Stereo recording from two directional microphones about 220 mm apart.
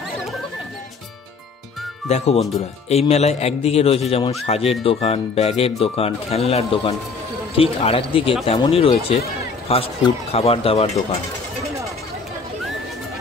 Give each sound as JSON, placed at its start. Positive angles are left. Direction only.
{"t": 2.0, "sound": "speech", "side_deg": 30}